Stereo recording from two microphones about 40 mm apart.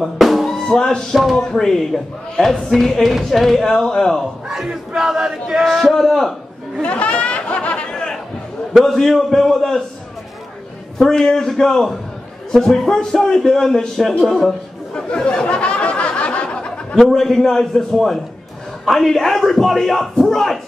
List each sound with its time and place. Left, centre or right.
0.0 s a man's voice: centre
4.5 s battle cry: centre
5.9 s speech: centre
6.8 s chatter: left
8.8 s a man's voice: centre
11.0 s a man's voice: centre
15.0 s a sound: left
17.0 s a man's voice: centre